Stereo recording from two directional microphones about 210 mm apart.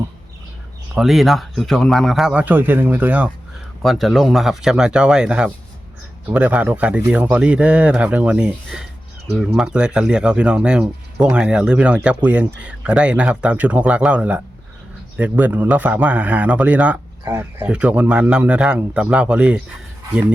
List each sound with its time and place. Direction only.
0.9 s speech: centre (ahead or behind)